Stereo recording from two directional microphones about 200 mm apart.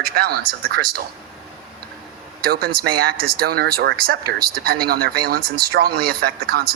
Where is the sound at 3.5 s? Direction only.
50° right (ahead or behind).